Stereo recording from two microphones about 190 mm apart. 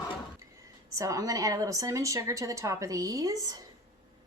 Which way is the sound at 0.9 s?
15° right (ahead or behind).